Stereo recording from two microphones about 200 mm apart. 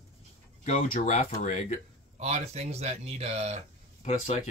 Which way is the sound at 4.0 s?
35° left (ahead or behind).